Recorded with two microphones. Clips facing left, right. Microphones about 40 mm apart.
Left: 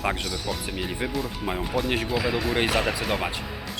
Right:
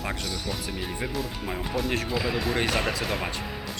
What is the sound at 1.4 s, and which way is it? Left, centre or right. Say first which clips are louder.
Speech: left 3 dB; centre.